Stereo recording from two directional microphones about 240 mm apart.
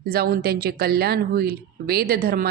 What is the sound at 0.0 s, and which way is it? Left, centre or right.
Speech, right.